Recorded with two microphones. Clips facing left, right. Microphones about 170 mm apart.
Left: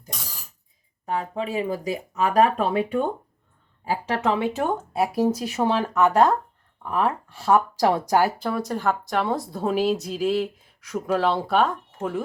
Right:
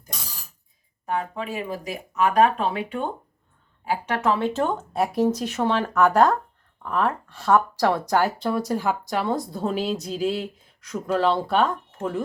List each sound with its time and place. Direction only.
1.0 s speech: 30° left (ahead or behind)
3.8 s a woman's voice: 30° left (ahead or behind)
4.4 s speech: 10° left (ahead or behind)